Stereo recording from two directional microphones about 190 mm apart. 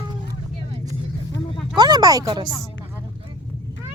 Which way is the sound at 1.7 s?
20° right (ahead or behind).